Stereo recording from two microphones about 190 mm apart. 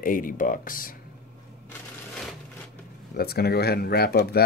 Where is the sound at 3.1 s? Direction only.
55° left (ahead or behind).